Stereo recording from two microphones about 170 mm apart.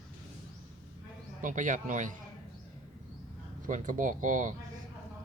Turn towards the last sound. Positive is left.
turn(degrees=-50)  # may be behind; listen again after turning